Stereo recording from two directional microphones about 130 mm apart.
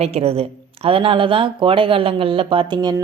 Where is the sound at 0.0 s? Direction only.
50° right (ahead or behind).